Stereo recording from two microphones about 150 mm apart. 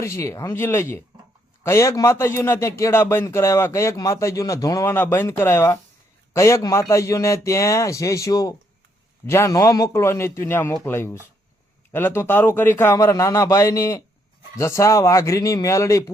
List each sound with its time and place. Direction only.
0.0 s a man's voice: 20° left (ahead or behind)